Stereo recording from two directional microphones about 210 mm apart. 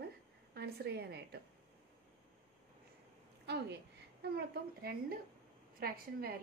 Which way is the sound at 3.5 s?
50° right (ahead or behind).